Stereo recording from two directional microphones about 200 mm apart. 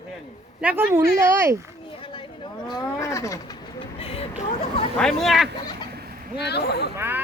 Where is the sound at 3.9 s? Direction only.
30° left (ahead or behind).